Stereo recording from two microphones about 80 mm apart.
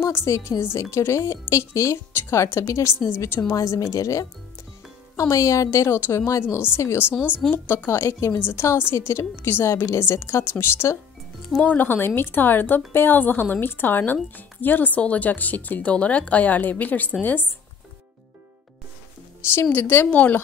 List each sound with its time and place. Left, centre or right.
0.0 s speech: left
19.7 s speech: left